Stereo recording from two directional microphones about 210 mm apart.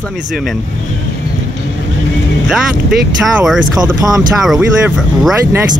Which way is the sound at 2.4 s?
5° right (ahead or behind).